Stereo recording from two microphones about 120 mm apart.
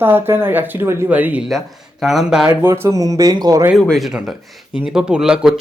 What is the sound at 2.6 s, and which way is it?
Speech, 20° right (ahead or behind).